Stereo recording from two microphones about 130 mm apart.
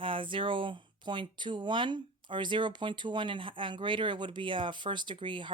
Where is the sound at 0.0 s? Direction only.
40° right (ahead or behind).